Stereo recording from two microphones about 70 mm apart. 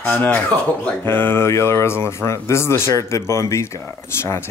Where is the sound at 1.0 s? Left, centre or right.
Left.